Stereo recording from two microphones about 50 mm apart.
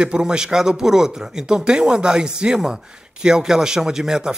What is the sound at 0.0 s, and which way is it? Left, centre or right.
Speech, centre.